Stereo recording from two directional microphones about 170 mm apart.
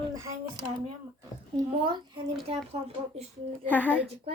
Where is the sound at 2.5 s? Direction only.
35° right (ahead or behind).